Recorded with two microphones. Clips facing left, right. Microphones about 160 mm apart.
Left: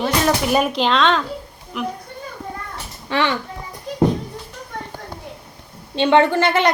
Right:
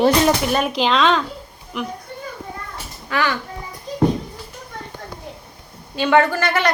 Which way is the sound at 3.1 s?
25° left (ahead or behind).